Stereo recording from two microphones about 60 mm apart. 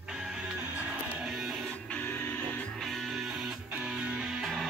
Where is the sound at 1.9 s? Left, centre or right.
Left.